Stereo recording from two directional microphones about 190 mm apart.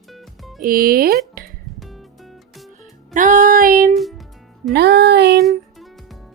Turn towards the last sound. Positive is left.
turn(degrees=0)  # may be behind; listen again after turning